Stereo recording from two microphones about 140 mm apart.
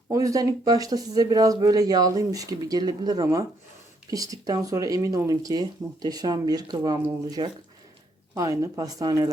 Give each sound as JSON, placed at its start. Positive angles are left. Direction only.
{"t": 0.1, "sound": "speech", "side_deg": -25}